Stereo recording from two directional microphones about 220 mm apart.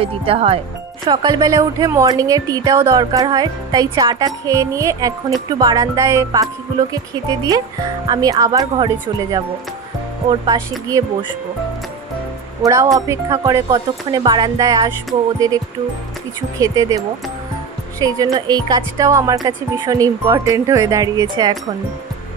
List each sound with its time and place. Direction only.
0.0 s a woman's voice: 25° right (ahead or behind)
8.1 s a woman's voice: 15° right (ahead or behind)
10.4 s speech: 15° right (ahead or behind)
12.6 s a woman's voice: 15° right (ahead or behind)
18.0 s a woman's voice: 15° right (ahead or behind)